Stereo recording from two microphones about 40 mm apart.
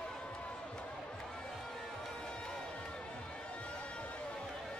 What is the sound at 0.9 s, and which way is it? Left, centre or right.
Music, centre.